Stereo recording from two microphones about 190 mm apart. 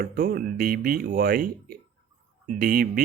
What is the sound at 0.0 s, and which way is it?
A man's voice, 50° right (ahead or behind).